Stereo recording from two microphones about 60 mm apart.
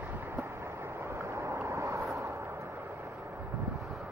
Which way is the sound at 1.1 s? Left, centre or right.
Right.